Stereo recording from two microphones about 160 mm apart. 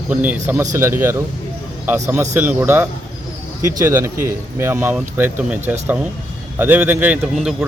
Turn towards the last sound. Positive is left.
turn(degrees=0)  # may be behind; listen again after turning